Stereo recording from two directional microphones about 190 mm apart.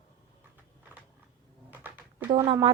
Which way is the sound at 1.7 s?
10° right (ahead or behind).